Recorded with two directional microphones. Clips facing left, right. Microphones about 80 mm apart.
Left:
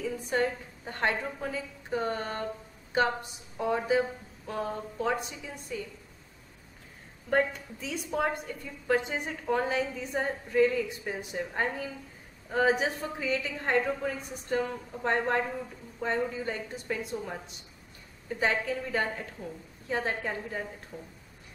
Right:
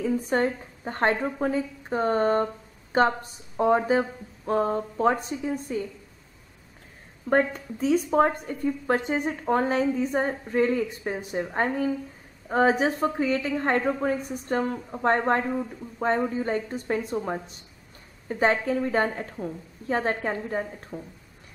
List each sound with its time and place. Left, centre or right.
0.0 s a woman's voice: right
7.2 s a woman's voice: right